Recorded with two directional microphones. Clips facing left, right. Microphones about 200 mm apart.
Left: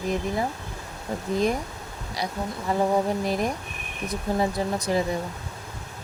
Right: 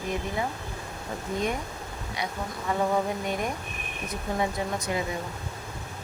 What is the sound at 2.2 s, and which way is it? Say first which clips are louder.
Speech: left 4 dB; 35° left (ahead or behind).